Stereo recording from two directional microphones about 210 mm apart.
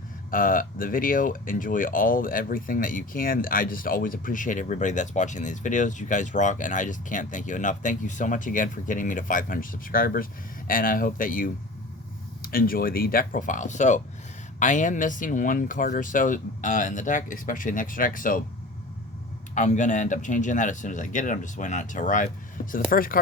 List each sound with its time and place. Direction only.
0.3 s speech: 40° left (ahead or behind)
19.5 s speech: 35° left (ahead or behind)